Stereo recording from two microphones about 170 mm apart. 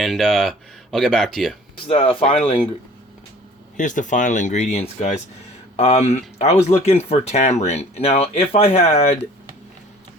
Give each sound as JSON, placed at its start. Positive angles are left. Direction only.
{"t": 0.0, "sound": "speech", "side_deg": 0}
{"t": 1.9, "sound": "speech", "side_deg": 35}
{"t": 3.8, "sound": "speech", "side_deg": 50}